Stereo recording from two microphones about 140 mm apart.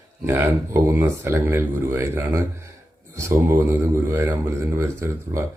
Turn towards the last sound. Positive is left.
turn(degrees=-20)  # may be behind; listen again after turning